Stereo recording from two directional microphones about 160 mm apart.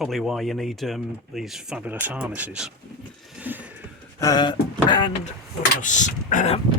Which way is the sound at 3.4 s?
10° right (ahead or behind).